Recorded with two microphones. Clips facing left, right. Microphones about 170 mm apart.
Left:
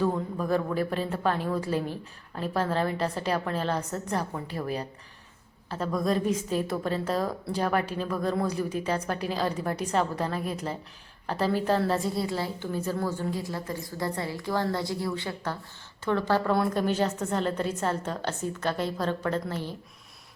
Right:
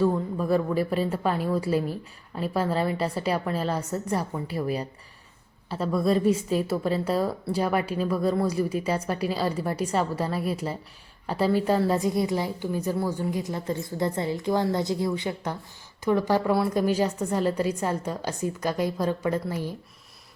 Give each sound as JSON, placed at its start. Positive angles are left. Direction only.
{"t": 0.0, "sound": "a woman's voice", "side_deg": -5}